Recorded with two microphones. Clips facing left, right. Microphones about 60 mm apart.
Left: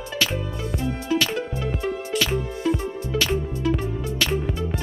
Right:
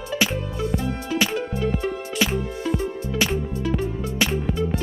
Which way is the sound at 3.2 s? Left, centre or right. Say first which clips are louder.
Even; centre.